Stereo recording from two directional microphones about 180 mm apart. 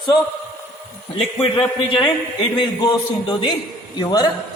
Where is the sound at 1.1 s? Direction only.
30° left (ahead or behind).